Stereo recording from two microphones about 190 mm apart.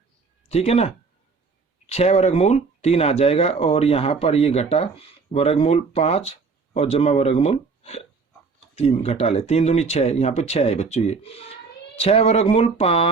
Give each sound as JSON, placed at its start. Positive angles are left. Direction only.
{"t": 0.4, "sound": "speech", "side_deg": 35}